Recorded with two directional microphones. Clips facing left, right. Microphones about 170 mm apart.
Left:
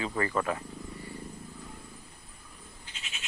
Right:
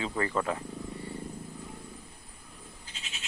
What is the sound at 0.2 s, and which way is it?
Speech, 20° right (ahead or behind).